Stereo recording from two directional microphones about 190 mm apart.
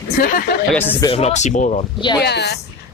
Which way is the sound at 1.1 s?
35° left (ahead or behind).